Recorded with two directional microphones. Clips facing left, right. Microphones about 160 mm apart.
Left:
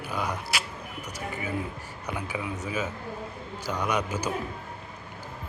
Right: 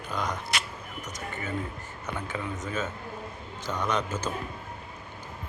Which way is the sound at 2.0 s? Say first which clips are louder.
Left 1 dB; 10° left (ahead or behind).